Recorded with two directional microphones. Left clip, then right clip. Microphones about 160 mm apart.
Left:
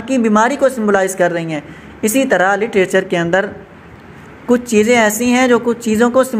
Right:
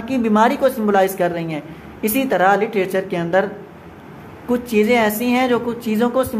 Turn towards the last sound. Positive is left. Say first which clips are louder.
# left 6 dB
turn(degrees=25)  # may be behind; listen again after turning